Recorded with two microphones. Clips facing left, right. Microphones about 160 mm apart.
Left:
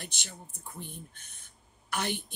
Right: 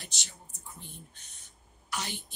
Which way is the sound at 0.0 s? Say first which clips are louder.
Left 5 dB; 55° left (ahead or behind).